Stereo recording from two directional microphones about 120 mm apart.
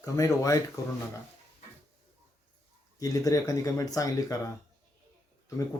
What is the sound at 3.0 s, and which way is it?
Speech, 30° left (ahead or behind).